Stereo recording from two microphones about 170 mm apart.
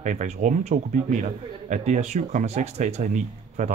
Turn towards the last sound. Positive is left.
turn(degrees=-45)  # may be behind; listen again after turning